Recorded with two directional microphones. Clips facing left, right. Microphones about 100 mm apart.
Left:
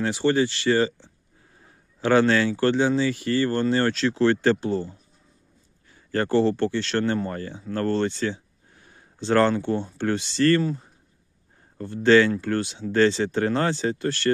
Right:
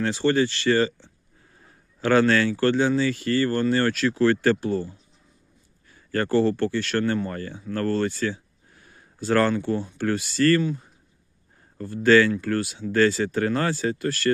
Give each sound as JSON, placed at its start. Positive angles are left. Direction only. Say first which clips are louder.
{"t": 0.0, "sound": "speech", "louder": "even", "side_deg": 15}
{"t": 10.6, "sound": "speech", "louder": "even", "side_deg": 40}
{"t": 12.0, "sound": "speech", "louder": "even", "side_deg": 25}